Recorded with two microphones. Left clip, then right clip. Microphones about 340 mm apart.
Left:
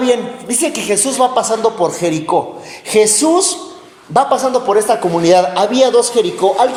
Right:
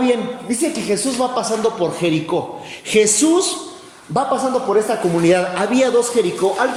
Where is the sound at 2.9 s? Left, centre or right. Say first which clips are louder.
Left 3 dB; centre.